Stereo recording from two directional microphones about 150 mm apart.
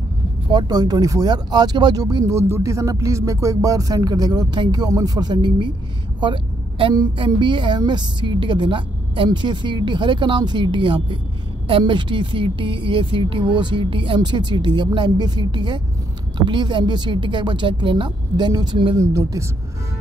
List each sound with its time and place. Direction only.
0.5 s a woman's voice: 25° right (ahead or behind)
18.9 s speech: 20° right (ahead or behind)